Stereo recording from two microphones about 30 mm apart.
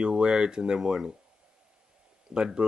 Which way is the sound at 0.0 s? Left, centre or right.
Right.